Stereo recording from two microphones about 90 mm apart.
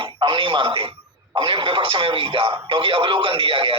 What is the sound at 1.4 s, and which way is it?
Speech, 70° right (ahead or behind).